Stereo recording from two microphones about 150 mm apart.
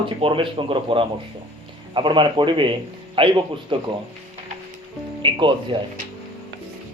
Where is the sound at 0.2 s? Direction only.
35° right (ahead or behind).